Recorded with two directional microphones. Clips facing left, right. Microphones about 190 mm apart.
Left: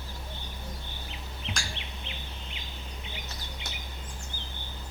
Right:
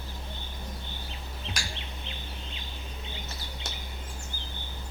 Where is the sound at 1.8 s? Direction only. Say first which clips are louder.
Right 1 dB; 20° left (ahead or behind).